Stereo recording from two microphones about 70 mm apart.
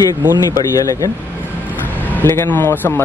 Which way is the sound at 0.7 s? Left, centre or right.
Left.